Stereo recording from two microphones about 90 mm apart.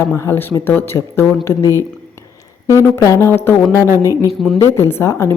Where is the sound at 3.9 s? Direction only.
35° right (ahead or behind).